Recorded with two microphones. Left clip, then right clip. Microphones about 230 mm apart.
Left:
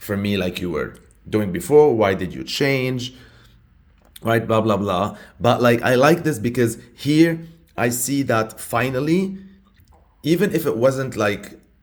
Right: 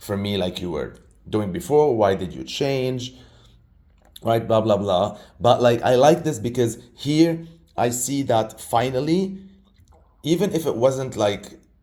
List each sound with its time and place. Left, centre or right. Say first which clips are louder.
0.0 s speech: left 1 dB; left
10.2 s speech: left 2 dB; left